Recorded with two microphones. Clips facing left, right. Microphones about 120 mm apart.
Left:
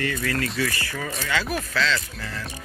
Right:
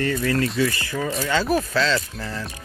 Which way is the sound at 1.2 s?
35° right (ahead or behind).